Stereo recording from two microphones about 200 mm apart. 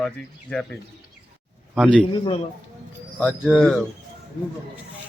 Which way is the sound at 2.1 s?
25° left (ahead or behind).